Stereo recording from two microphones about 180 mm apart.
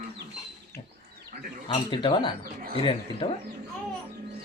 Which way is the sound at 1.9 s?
25° left (ahead or behind).